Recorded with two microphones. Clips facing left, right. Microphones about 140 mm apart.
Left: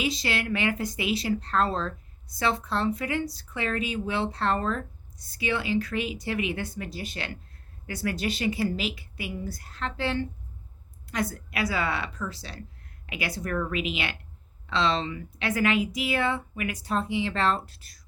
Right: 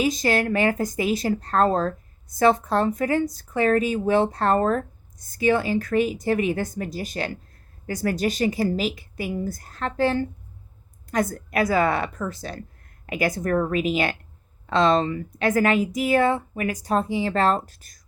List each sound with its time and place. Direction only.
0.0 s speech: 45° right (ahead or behind)